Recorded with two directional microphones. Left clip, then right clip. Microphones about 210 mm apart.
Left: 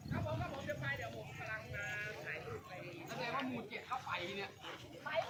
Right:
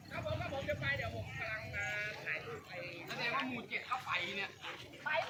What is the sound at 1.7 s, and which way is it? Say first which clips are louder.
Sheep: right 4 dB; 35° right (ahead or behind).